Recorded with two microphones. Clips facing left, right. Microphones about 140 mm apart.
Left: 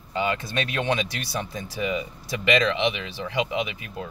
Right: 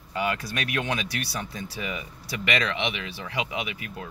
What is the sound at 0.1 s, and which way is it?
Speech, 25° left (ahead or behind).